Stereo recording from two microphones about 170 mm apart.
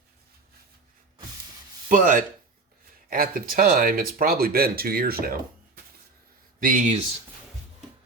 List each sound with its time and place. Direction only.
1.9 s speech: 55° right (ahead or behind)
6.6 s speech: 50° right (ahead or behind)